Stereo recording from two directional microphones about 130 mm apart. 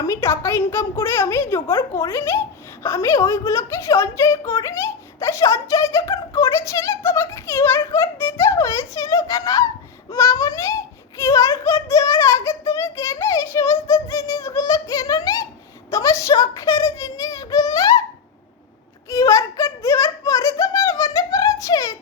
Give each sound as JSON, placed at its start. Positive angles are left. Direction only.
{"t": 0.0, "sound": "a woman's voice", "side_deg": 20}
{"t": 19.0, "sound": "a woman's voice", "side_deg": 25}